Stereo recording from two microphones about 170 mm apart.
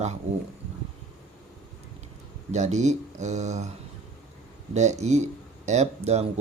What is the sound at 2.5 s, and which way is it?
Speech, 40° right (ahead or behind).